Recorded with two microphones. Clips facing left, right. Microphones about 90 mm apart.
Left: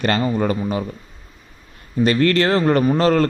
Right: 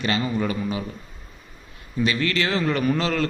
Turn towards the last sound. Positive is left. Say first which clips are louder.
# left 7 dB
turn(degrees=45)  # may be behind; listen again after turning